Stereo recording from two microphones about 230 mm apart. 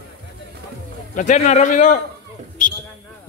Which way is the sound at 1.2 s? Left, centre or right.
Left.